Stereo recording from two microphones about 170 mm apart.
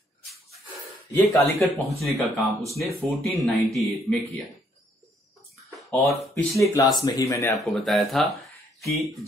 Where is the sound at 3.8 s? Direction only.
Centre (ahead or behind).